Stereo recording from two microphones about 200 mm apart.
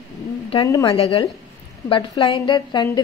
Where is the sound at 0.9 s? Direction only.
30° left (ahead or behind).